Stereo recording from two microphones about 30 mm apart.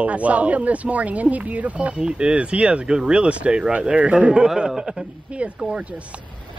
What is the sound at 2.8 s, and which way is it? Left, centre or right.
Speech, right.